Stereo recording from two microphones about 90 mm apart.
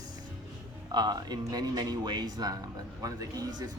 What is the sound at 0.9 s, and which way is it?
Speech, 50° right (ahead or behind).